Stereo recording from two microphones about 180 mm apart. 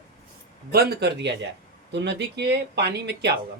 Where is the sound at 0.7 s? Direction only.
65° right (ahead or behind).